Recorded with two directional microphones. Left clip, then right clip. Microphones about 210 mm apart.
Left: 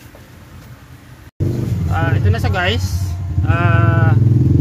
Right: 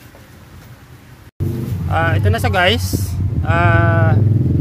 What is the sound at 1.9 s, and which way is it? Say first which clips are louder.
Speech: right 4 dB; 35° right (ahead or behind).